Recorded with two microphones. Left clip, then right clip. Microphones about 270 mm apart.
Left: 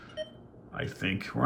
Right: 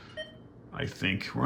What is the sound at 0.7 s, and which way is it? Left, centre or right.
Speech, centre.